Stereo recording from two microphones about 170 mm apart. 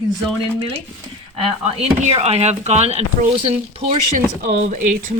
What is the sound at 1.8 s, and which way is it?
Speech, 40° right (ahead or behind).